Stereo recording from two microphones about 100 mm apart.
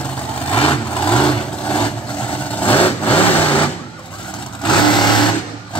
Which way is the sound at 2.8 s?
15° left (ahead or behind).